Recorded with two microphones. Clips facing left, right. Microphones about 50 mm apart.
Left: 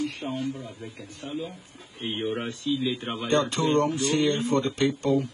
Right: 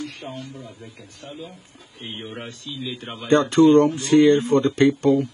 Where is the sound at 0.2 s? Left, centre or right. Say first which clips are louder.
Left 3 dB; centre.